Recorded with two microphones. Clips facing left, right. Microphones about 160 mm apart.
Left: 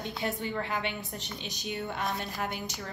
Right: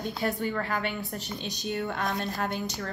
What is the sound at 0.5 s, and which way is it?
A woman's voice, 20° left (ahead or behind).